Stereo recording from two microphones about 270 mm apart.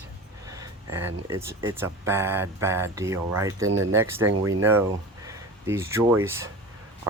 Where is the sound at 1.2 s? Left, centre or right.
Centre.